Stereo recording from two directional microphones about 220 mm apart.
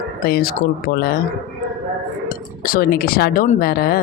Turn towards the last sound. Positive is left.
turn(degrees=40)  # may be behind; listen again after turning